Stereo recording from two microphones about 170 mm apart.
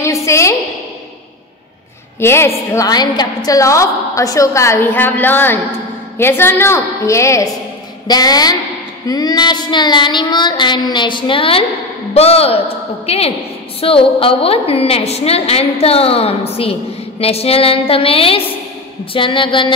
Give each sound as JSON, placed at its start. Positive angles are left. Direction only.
{"t": 0.0, "sound": "a sound", "side_deg": 15}
{"t": 2.1, "sound": "a woman's voice", "side_deg": 15}
{"t": 8.1, "sound": "child singing", "side_deg": 25}
{"t": 12.1, "sound": "a woman's voice", "side_deg": 35}
{"t": 19.1, "sound": "child singing", "side_deg": 30}